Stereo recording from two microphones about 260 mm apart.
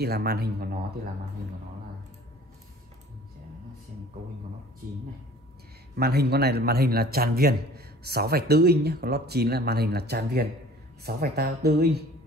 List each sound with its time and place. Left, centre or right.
0.0 s a man's voice: right
5.9 s a man's voice: right